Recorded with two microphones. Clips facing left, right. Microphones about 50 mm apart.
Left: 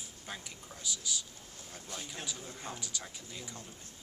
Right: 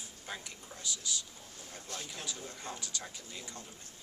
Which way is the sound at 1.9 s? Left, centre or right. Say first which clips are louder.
Even; centre.